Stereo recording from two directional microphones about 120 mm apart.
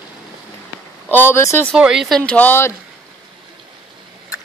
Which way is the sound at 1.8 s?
5° right (ahead or behind).